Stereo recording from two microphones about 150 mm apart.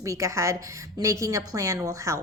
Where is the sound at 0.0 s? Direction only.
20° right (ahead or behind).